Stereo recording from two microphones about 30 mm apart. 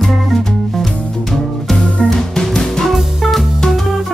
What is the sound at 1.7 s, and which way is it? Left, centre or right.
Music, left.